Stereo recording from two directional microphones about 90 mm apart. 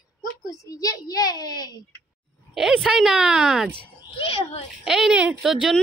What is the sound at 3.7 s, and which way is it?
Speech, 90° left.